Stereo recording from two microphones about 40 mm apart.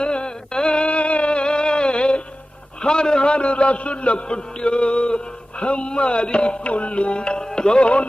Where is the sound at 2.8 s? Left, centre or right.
Left.